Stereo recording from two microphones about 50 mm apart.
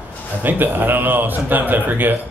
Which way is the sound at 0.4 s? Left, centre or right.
Right.